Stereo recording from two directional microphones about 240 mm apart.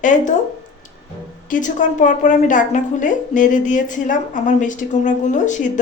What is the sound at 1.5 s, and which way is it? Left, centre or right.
A woman's voice, left.